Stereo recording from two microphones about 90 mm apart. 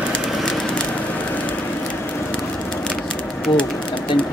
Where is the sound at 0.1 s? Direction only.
5° left (ahead or behind).